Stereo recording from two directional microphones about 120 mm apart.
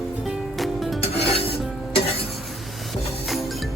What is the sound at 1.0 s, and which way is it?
Filing, 55° left (ahead or behind).